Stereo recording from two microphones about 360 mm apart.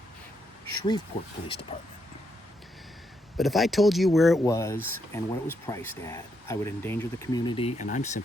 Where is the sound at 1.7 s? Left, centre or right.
Centre.